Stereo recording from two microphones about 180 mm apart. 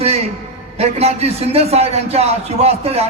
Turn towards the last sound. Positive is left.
turn(degrees=-35)  # may be behind; listen again after turning